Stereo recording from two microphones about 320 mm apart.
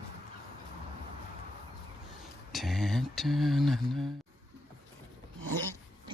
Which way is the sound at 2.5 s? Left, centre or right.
Centre.